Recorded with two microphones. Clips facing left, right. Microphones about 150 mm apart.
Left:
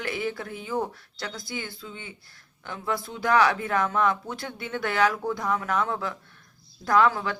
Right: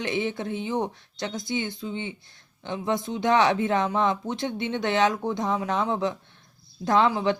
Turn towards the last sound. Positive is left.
turn(degrees=-20)  # may be behind; listen again after turning